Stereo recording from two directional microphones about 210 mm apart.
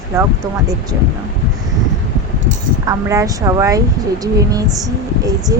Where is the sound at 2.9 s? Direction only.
15° right (ahead or behind).